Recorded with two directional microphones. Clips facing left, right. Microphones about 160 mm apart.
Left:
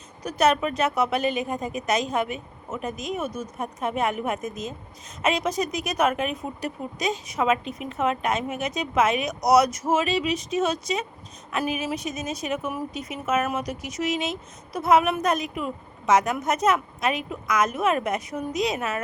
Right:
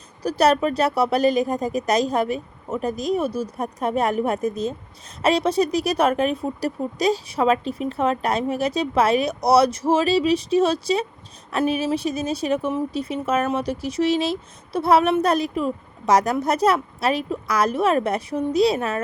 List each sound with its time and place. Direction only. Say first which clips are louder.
0.2 s speech: right 3 dB; 35° right (ahead or behind)